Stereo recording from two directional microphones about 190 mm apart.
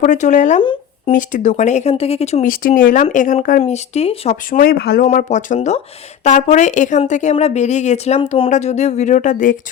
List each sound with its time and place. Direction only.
0.0 s a woman's voice: 40° left (ahead or behind)
0.6 s a sound: 25° left (ahead or behind)
1.1 s a woman's voice: 40° left (ahead or behind)
3.6 s a woman's voice: 35° left (ahead or behind)
4.6 s speech: 55° left (ahead or behind)
5.1 s a woman's voice: 40° left (ahead or behind)